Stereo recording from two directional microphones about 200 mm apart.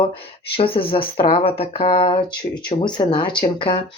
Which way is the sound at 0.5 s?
25° left (ahead or behind).